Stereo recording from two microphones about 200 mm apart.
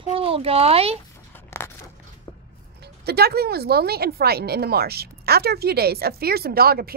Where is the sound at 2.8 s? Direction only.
50° right (ahead or behind).